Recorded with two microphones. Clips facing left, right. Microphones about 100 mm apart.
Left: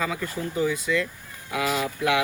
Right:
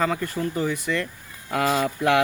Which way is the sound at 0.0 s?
40° right (ahead or behind).